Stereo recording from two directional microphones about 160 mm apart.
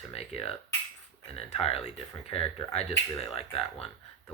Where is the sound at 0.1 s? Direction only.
40° left (ahead or behind).